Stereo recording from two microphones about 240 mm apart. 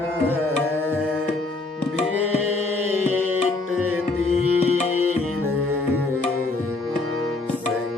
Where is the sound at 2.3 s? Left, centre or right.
Left.